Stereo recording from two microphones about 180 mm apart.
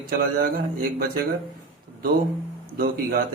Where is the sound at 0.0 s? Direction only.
55° right (ahead or behind).